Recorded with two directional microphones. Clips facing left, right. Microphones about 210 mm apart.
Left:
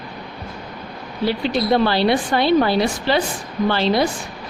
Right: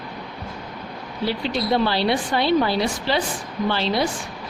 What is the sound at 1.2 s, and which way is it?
A woman's voice, 55° left (ahead or behind).